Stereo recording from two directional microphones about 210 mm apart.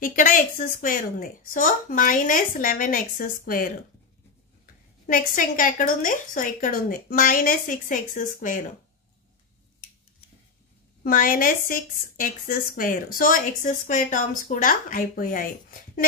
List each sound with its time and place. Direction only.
0.0 s speech: 40° left (ahead or behind)
5.0 s speech: 40° left (ahead or behind)
11.1 s speech: 40° left (ahead or behind)